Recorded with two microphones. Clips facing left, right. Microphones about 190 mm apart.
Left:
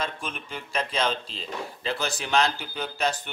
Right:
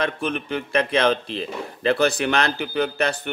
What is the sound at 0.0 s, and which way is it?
Speech, 60° right (ahead or behind).